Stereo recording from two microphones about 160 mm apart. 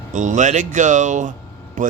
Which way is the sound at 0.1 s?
50° right (ahead or behind).